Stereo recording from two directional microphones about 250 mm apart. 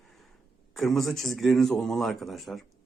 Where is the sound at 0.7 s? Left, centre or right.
Centre.